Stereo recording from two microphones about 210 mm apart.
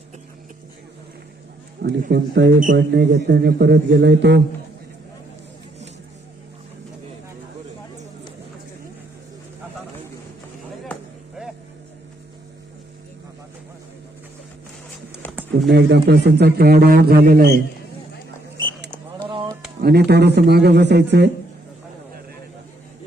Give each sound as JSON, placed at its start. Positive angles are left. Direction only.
{"t": 1.8, "sound": "a man's voice", "side_deg": -50}
{"t": 15.7, "sound": "a man's voice", "side_deg": -55}
{"t": 19.3, "sound": "a sound", "side_deg": -20}
{"t": 19.8, "sound": "a man's voice", "side_deg": -50}